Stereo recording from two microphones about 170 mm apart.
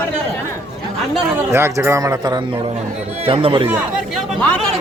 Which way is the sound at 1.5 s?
15° right (ahead or behind).